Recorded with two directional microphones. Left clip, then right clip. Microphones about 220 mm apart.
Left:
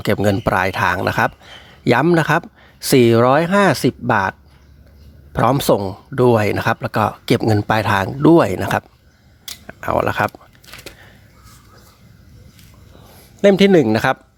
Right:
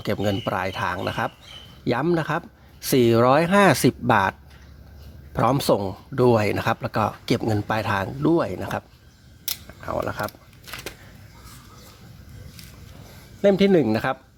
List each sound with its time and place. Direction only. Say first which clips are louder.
0.0 s speech: left 8 dB; 25° left (ahead or behind)
10.7 s a sound: right 2 dB; 15° left (ahead or behind)
13.4 s speech: left 6 dB; 35° left (ahead or behind)